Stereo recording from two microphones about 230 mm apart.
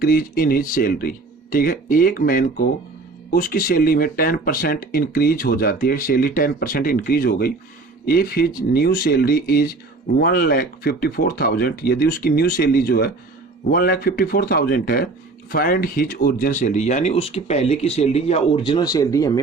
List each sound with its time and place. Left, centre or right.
0.0 s speech: left; by 19.4 s centre